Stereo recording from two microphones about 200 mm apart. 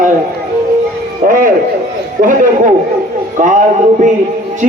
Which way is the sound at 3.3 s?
40° right (ahead or behind).